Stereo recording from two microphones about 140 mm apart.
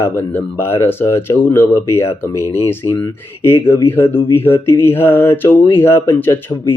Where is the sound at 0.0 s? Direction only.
15° left (ahead or behind).